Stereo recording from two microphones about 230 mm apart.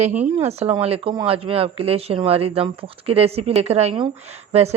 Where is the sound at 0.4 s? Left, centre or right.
Right.